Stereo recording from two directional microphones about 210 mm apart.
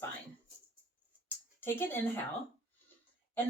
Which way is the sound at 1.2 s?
10° left (ahead or behind).